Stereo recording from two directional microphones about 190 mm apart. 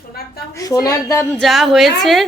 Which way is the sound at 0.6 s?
20° left (ahead or behind).